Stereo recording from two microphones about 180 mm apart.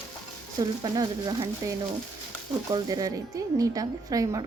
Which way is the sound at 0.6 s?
25° right (ahead or behind).